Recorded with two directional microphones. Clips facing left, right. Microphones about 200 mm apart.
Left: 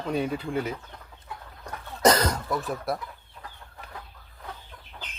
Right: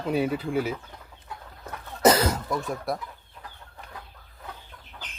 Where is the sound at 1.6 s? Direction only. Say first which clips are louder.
Right 1 dB; 5° right (ahead or behind).